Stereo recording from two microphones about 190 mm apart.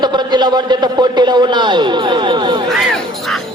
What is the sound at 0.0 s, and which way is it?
A man's voice, 25° right (ahead or behind).